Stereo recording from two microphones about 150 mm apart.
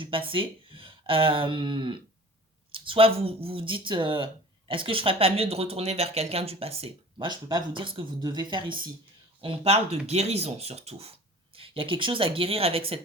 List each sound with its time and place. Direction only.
0.0 s speech: 35° right (ahead or behind)